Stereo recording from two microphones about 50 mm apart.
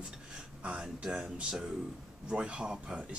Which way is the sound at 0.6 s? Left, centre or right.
Right.